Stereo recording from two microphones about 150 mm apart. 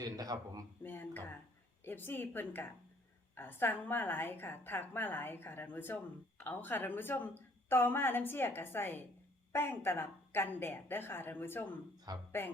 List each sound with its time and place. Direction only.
0.0 s speech: 25° right (ahead or behind)
0.8 s a sound: 15° left (ahead or behind)
1.8 s a woman's voice: 15° left (ahead or behind)
12.1 s speech: 25° right (ahead or behind)